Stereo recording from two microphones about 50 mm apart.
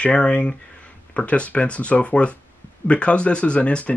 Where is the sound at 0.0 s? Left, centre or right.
Left.